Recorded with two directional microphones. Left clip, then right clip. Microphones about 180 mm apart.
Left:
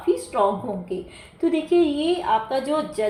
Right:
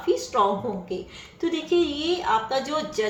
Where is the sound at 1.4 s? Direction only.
25° left (ahead or behind).